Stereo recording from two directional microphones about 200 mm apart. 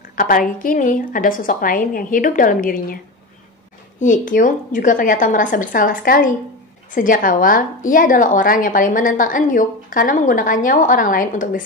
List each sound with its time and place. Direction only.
0.1 s a woman's voice: 45° left (ahead or behind)
4.0 s a woman's voice: 40° left (ahead or behind)